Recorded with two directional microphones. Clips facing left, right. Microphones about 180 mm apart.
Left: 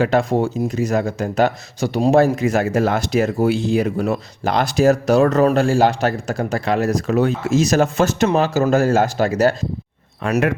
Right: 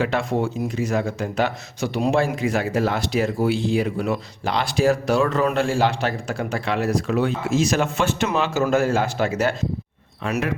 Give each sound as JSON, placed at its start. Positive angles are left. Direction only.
{"t": 0.0, "sound": "speech", "side_deg": 40}